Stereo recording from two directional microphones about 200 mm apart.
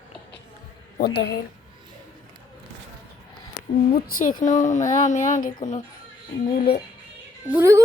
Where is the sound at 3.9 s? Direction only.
45° left (ahead or behind).